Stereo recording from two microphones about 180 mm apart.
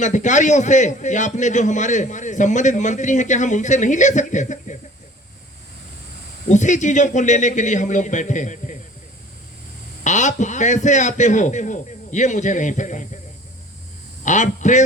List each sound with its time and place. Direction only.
0.0 s a man's voice: 45° left (ahead or behind)
6.5 s a man's voice: 40° left (ahead or behind)
10.0 s a man's voice: 40° left (ahead or behind)
14.3 s a man's voice: 40° left (ahead or behind)